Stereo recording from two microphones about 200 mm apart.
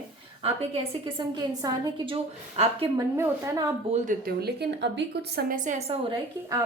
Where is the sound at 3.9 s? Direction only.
40° right (ahead or behind); by 5.6 s 55° right (ahead or behind).